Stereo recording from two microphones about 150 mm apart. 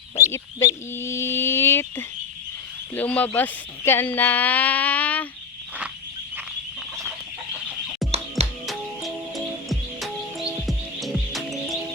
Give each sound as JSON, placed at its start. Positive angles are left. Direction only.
{"t": 0.2, "sound": "speech", "side_deg": 20}
{"t": 0.9, "sound": "a sound", "side_deg": 15}
{"t": 2.9, "sound": "speech", "side_deg": 10}
{"t": 8.6, "sound": "music", "side_deg": 0}